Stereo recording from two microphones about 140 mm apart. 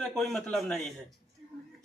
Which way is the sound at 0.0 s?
5° left (ahead or behind).